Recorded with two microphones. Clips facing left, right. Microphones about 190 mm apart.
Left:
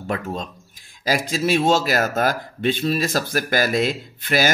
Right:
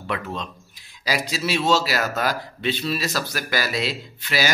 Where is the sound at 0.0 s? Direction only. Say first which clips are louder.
Left 3 dB; 45° left (ahead or behind).